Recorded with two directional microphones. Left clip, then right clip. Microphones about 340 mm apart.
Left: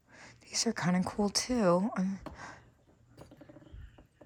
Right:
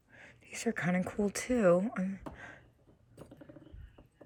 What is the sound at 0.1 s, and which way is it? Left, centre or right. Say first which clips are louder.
Speech: left 7 dB; centre.